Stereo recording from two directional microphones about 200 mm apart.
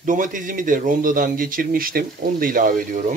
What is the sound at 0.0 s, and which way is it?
Speech, 40° right (ahead or behind).